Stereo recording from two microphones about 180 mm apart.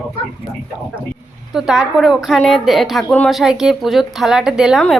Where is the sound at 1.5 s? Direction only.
5° right (ahead or behind).